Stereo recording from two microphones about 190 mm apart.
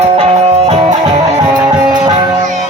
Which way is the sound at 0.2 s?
35° right (ahead or behind).